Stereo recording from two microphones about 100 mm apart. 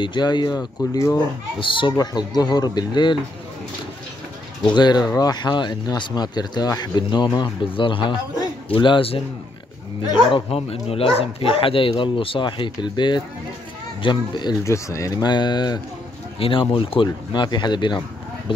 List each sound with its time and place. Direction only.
0.0 s speech: 50° left (ahead or behind); by 1.2 s 30° left (ahead or behind)
1.6 s speech: 55° left (ahead or behind)
2.0 s speech: 40° left (ahead or behind)
4.6 s speech: 45° left (ahead or behind); by 9.2 s 65° left (ahead or behind)
10.3 s speech: 75° left (ahead or behind); by 14.5 s 50° left (ahead or behind)
14.6 s speech: 30° left (ahead or behind)
16.3 s speech: 65° left (ahead or behind)